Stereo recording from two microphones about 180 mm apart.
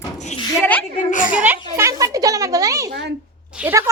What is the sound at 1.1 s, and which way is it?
Speech, 45° left (ahead or behind).